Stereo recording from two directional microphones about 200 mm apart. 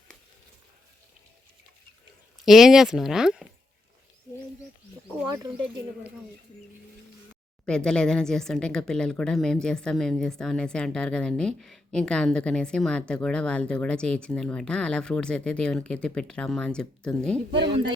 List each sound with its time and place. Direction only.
2.4 s a woman's voice: centre (ahead or behind)
5.0 s speech: 5° right (ahead or behind)
7.6 s a woman's voice: 5° left (ahead or behind)
17.5 s speech: 25° right (ahead or behind)